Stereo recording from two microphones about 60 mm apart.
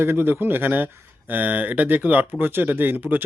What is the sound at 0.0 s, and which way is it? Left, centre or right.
A man's voice, right.